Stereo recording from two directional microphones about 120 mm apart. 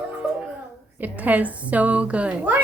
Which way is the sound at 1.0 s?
15° right (ahead or behind).